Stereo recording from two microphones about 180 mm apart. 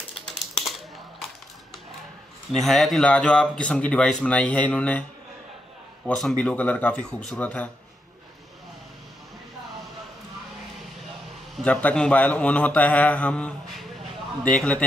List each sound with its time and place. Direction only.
0.1 s typing: centre (ahead or behind)
2.5 s speech: centre (ahead or behind)
6.0 s a man's voice: 5° left (ahead or behind)
11.5 s a man's voice: 5° left (ahead or behind)